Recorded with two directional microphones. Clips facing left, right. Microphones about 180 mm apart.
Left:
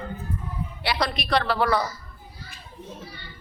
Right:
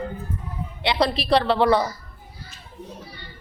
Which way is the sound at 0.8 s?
25° right (ahead or behind).